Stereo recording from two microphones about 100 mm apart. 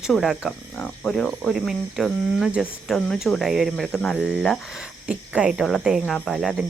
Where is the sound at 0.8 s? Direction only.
10° left (ahead or behind).